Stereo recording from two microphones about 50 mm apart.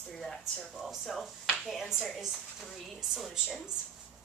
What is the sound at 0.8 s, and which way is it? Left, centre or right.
A woman's voice, centre.